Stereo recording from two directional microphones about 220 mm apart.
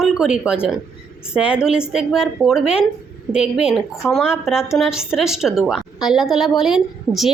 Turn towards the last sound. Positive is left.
turn(degrees=0)  # may be behind; listen again after turning